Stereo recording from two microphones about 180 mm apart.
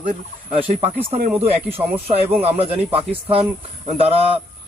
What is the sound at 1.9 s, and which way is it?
Speech, 10° right (ahead or behind).